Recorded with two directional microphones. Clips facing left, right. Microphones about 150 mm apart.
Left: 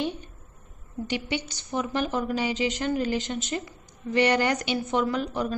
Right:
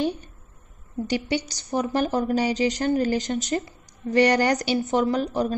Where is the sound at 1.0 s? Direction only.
40° right (ahead or behind).